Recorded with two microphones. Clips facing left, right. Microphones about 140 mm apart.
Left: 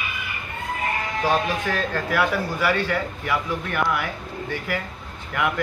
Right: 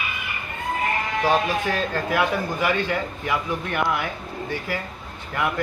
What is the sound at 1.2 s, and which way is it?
A man's voice, 15° right (ahead or behind).